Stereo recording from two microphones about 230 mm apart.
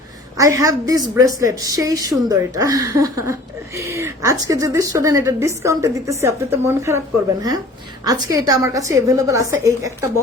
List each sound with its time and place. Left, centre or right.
0.3 s speech: centre
8.0 s speech: centre